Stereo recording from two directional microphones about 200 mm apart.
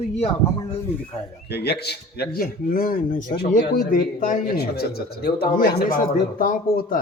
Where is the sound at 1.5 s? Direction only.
55° left (ahead or behind).